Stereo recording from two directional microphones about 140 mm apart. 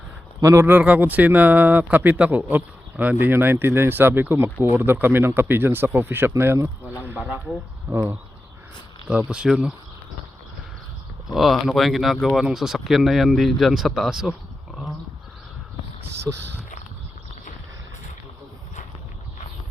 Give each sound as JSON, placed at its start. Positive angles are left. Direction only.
{"t": 0.4, "sound": "speech", "side_deg": -20}
{"t": 7.0, "sound": "a sound", "side_deg": -15}
{"t": 9.0, "sound": "speech", "side_deg": -5}
{"t": 11.3, "sound": "speech", "side_deg": 0}
{"t": 16.2, "sound": "speech", "side_deg": -15}